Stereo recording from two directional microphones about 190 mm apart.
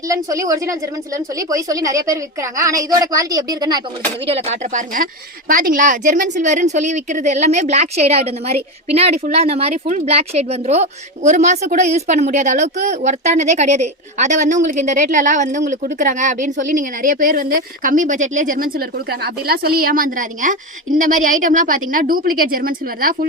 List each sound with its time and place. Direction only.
0.1 s a woman's voice: 15° right (ahead or behind)
4.3 s a woman's voice: 35° right (ahead or behind); by 23.1 s 50° right (ahead or behind)